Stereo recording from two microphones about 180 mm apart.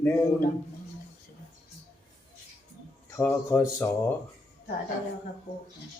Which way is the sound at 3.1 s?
15° left (ahead or behind).